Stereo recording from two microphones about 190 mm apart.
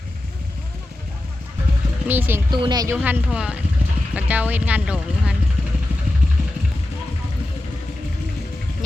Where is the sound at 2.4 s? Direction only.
25° right (ahead or behind).